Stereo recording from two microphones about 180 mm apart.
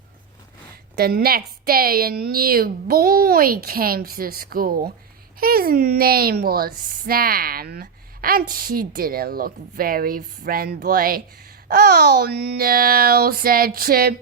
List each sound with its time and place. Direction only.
0.9 s a woman's voice: 60° right (ahead or behind)